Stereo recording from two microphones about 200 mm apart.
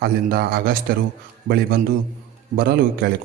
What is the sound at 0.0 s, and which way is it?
Speech, 50° right (ahead or behind).